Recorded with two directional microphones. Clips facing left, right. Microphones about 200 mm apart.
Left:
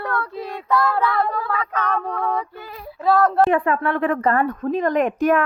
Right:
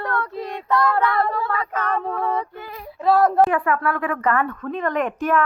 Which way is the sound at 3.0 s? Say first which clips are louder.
Right 1 dB; 10° right (ahead or behind).